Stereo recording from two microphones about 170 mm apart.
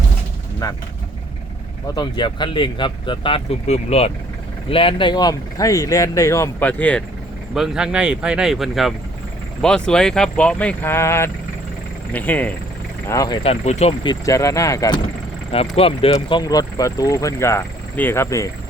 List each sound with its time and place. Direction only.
2.0 s speech: 25° left (ahead or behind); by 7.0 s 10° left (ahead or behind)
7.5 s speech: 5° right (ahead or behind)
13.1 s speech: 20° left (ahead or behind)
13.4 s speech: 40° left (ahead or behind)
14.0 s speech: 20° left (ahead or behind)
15.5 s speech: 35° left (ahead or behind)
16.4 s speech: 20° left (ahead or behind)